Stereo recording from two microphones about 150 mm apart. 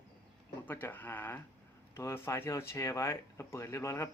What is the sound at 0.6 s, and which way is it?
Speech, 15° left (ahead or behind).